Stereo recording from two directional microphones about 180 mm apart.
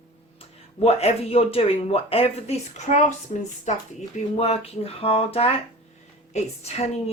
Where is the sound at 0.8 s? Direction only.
35° left (ahead or behind).